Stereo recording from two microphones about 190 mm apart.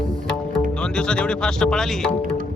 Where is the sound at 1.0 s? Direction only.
5° left (ahead or behind).